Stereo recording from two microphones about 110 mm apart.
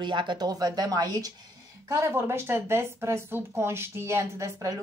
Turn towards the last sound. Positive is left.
turn(degrees=-25)  # may be behind; listen again after turning